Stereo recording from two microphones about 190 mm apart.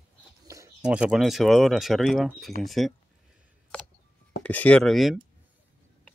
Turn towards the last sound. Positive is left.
turn(degrees=0)  # may be behind; listen again after turning